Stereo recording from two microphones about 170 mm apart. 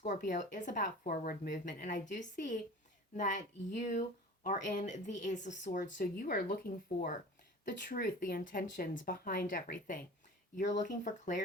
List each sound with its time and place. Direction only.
0.0 s speech: 45° left (ahead or behind)